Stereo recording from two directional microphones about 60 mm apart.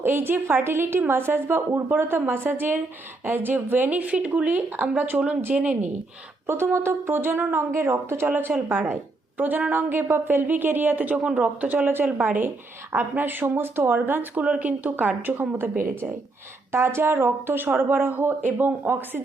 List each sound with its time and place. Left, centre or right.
0.0 s speech: right
5.5 s speech: centre
6.5 s speech: right
8.3 s speech: right